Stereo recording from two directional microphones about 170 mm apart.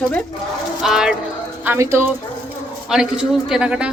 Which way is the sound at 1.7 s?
15° right (ahead or behind).